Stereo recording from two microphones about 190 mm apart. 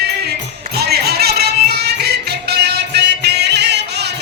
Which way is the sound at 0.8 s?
55° right (ahead or behind).